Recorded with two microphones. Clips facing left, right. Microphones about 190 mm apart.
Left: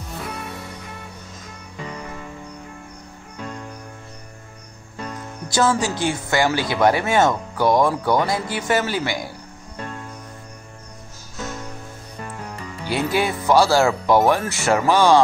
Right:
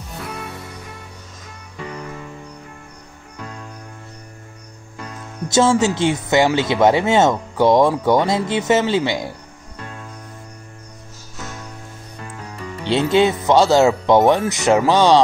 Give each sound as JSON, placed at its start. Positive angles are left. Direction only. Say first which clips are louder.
{"t": 5.5, "sound": "speech", "louder": "right 5 dB", "side_deg": -25}
{"t": 12.8, "sound": "speech", "louder": "right 6 dB", "side_deg": -25}